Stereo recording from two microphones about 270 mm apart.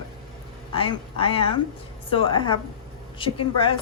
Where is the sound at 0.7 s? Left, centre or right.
Centre.